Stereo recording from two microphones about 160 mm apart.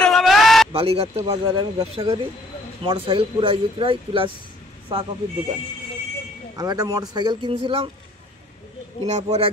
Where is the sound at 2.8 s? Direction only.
35° right (ahead or behind).